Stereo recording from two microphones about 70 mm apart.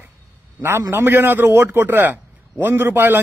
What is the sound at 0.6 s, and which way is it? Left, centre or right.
A man's voice, right.